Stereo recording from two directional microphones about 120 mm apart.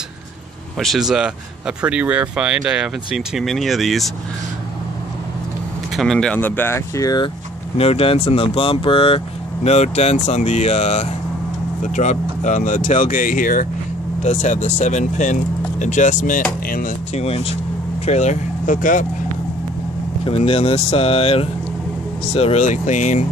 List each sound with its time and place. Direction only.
0.7 s speech: centre (ahead or behind)
5.9 s speech: 5° left (ahead or behind)
7.0 s speech: 30° left (ahead or behind)
7.7 s speech: 55° left (ahead or behind)
11.8 s speech: 85° left
14.2 s speech: 90° left
16.8 s speech: 60° left (ahead or behind)
18.0 s speech: 70° left (ahead or behind); by 19.0 s 90° left
20.2 s speech: 55° left (ahead or behind); by 23.2 s 90° left